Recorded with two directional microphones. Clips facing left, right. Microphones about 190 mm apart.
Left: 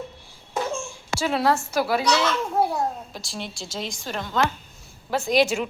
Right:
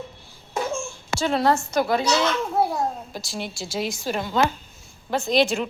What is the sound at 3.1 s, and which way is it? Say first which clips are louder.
A woman's voice: right 3 dB; centre (ahead or behind).